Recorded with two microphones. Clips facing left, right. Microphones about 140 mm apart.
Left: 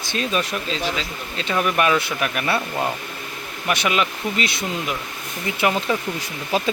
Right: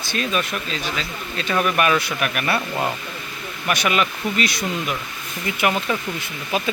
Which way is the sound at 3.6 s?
25° left (ahead or behind).